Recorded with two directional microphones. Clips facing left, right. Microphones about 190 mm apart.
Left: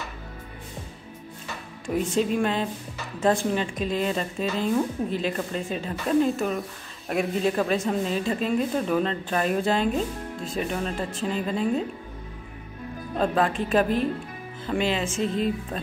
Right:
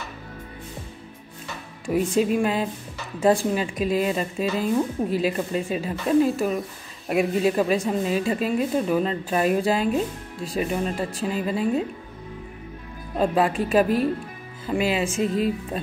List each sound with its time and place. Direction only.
1.9 s a woman's voice: 5° right (ahead or behind)
13.2 s a woman's voice: 10° right (ahead or behind)